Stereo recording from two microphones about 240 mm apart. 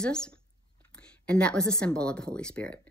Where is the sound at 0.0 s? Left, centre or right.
Centre.